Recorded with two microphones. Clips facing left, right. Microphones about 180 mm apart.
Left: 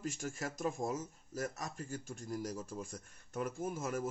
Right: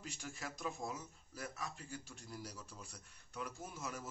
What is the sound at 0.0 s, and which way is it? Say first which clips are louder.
Speech: left 8 dB; 45° left (ahead or behind).